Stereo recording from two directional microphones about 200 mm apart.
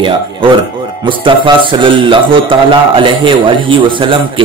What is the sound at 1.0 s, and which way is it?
A man's voice, 25° right (ahead or behind).